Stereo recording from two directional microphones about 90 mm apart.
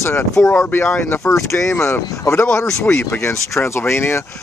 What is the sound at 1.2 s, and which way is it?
Speech, 35° left (ahead or behind).